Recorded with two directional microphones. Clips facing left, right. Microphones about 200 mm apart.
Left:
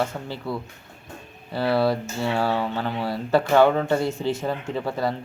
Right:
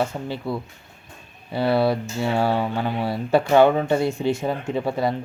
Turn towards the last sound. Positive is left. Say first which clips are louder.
# right 3 dB
turn(degrees=-15)  # may be behind; listen again after turning